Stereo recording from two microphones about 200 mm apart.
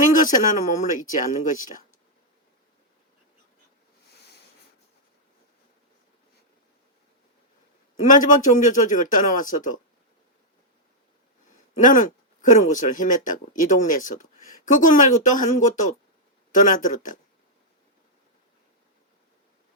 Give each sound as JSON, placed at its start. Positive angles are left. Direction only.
{"t": 0.1, "sound": "speech", "side_deg": 40}
{"t": 8.0, "sound": "speech", "side_deg": 40}
{"t": 11.8, "sound": "speech", "side_deg": 40}